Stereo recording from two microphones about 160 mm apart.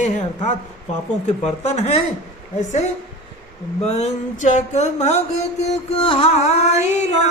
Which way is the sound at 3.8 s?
45° left (ahead or behind).